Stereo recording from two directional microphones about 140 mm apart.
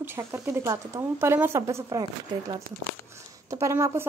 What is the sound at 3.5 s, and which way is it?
Speech, 20° right (ahead or behind).